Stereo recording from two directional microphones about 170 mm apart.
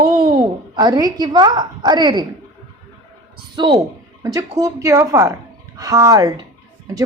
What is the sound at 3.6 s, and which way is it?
A woman's voice, 25° right (ahead or behind).